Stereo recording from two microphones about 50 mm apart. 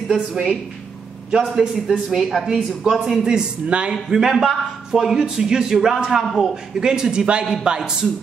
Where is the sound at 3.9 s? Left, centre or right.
Centre.